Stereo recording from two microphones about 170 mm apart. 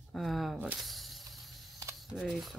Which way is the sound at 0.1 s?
Centre (ahead or behind).